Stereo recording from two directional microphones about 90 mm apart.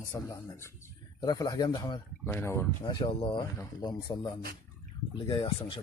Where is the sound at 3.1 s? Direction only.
70° left (ahead or behind).